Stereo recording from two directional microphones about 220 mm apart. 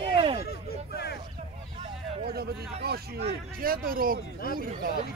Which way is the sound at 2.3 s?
45° right (ahead or behind).